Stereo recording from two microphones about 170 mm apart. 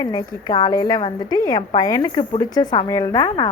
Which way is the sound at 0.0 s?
20° left (ahead or behind).